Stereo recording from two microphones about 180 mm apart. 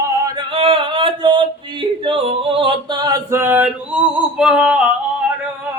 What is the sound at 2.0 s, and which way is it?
Male singing, 30° right (ahead or behind).